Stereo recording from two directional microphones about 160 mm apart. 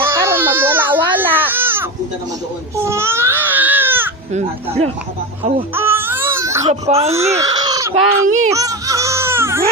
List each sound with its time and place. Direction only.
0.0 s baby cry: 15° right (ahead or behind)
2.8 s baby cry: 15° right (ahead or behind)
4.4 s speech: 45° right (ahead or behind)
5.7 s baby cry: 15° right (ahead or behind)
6.7 s speech: 40° right (ahead or behind)
7.3 s speech: 20° right (ahead or behind)
8.4 s baby cry: 20° right (ahead or behind)